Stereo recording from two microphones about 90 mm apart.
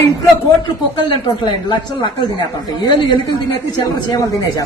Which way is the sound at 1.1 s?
60° left (ahead or behind).